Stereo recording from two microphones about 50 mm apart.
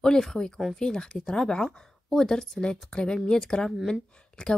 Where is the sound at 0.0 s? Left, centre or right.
Centre.